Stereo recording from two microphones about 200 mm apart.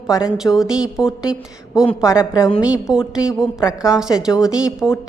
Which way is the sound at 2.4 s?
5° right (ahead or behind).